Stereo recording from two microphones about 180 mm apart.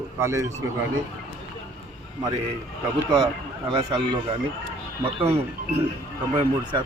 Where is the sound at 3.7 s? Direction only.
25° right (ahead or behind).